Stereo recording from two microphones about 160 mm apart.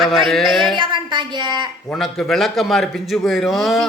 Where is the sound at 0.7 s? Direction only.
30° right (ahead or behind).